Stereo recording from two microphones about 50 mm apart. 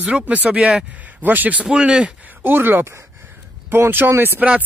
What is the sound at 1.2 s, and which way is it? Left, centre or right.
Speech, right.